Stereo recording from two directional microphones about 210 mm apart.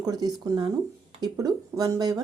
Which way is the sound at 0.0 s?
20° right (ahead or behind).